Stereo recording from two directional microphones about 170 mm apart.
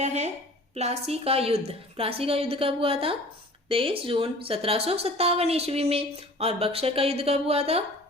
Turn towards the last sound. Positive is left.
turn(degrees=-35)  # may be behind; listen again after turning